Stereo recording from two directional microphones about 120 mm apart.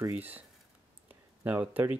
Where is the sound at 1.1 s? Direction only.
15° right (ahead or behind).